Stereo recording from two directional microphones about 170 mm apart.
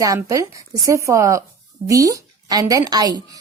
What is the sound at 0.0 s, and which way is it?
A woman's voice, 20° right (ahead or behind).